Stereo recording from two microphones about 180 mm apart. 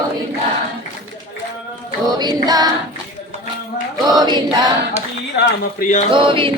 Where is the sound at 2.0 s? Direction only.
20° right (ahead or behind).